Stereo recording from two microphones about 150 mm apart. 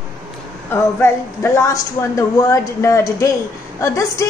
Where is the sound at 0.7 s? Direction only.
15° left (ahead or behind).